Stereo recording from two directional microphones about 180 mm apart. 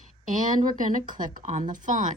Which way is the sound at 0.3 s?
45° right (ahead or behind).